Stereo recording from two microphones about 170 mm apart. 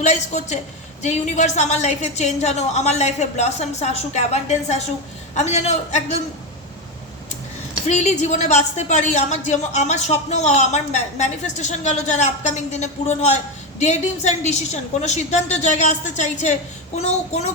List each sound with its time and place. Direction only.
0.0 s a woman's voice: 45° left (ahead or behind)
7.9 s speech: 45° left (ahead or behind)